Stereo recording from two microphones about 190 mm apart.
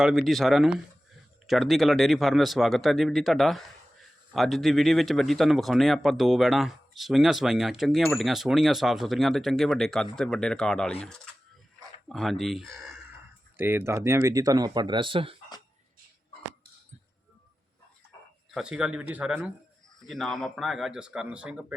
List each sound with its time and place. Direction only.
0.0 s speech: centre (ahead or behind)
12.0 s speech: centre (ahead or behind)
13.6 s speech: 10° right (ahead or behind); by 15.4 s 30° right (ahead or behind)
18.5 s speech: 5° right (ahead or behind)
20.1 s speech: centre (ahead or behind)